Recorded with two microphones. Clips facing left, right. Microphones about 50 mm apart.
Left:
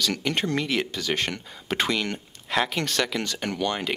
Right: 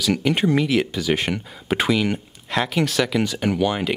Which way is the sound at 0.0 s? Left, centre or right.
Centre.